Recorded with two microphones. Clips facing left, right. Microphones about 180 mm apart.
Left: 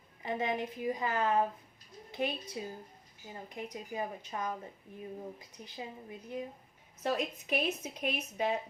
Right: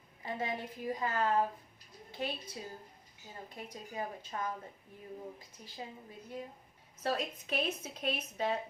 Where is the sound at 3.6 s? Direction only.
20° left (ahead or behind).